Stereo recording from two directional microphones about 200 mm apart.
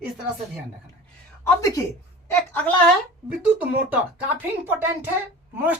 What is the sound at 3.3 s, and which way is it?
Speech, 10° right (ahead or behind).